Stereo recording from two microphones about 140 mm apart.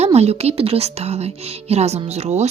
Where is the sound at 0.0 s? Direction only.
50° right (ahead or behind).